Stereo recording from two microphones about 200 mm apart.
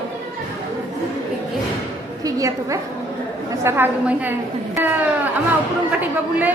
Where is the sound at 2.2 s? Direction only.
15° right (ahead or behind).